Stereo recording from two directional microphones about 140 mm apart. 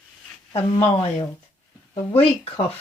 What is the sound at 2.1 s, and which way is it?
Speech, 45° left (ahead or behind).